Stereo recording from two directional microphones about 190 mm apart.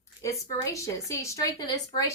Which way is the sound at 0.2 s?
15° left (ahead or behind).